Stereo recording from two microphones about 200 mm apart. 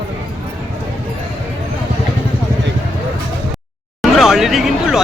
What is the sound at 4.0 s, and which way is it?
Vehicle, centre (ahead or behind).